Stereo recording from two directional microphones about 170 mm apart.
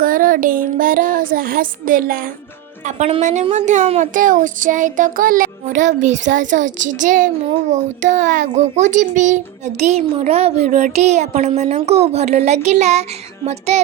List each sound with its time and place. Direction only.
0.0 s music: 55° right (ahead or behind)
2.8 s child singing: 45° right (ahead or behind)
7.7 s a child's voice: 45° right (ahead or behind)